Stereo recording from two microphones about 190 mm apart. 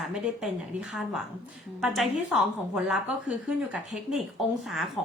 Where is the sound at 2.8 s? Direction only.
5° right (ahead or behind).